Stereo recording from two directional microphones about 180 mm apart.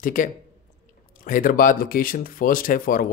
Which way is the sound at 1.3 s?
50° left (ahead or behind).